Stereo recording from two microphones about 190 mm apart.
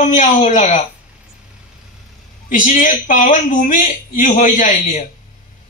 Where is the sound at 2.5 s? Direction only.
45° left (ahead or behind).